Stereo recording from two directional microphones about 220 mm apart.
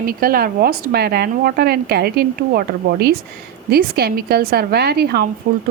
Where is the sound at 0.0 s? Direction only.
40° right (ahead or behind).